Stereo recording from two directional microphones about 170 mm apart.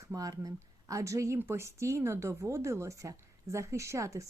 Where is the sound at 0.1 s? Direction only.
20° right (ahead or behind).